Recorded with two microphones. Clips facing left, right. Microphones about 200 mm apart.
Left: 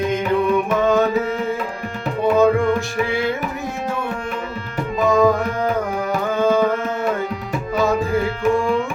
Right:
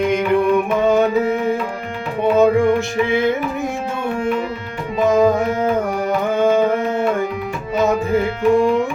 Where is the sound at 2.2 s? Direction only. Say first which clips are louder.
Right 2 dB; 20° right (ahead or behind).